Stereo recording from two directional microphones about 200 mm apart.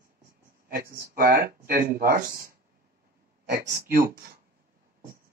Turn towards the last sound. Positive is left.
turn(degrees=-50)  # may be behind; listen again after turning